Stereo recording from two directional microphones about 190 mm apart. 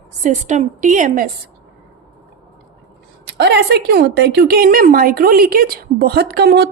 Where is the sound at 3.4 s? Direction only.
60° right (ahead or behind).